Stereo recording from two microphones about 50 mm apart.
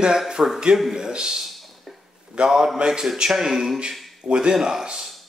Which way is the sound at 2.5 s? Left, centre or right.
Centre.